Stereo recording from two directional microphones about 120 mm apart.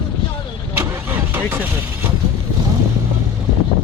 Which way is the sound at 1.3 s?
15° right (ahead or behind).